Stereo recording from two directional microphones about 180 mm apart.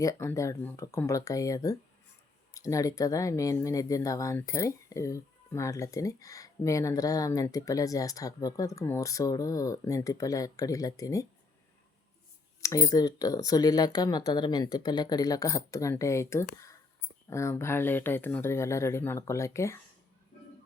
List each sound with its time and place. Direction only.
0.0 s speech: 15° left (ahead or behind)
12.6 s speech: 20° left (ahead or behind)